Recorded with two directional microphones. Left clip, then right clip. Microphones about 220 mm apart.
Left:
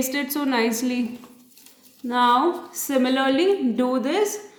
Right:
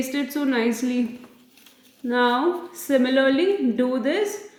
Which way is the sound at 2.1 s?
45° left (ahead or behind).